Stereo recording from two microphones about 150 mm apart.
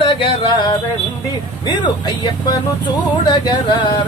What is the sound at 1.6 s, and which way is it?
Speech, 30° left (ahead or behind).